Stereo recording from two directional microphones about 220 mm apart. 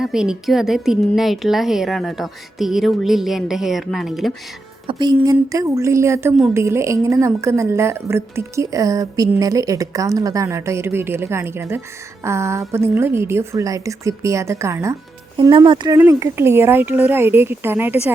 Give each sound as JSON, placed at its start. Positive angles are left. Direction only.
{"t": 0.0, "sound": "a woman's voice", "side_deg": -5}
{"t": 4.9, "sound": "a woman's voice", "side_deg": -20}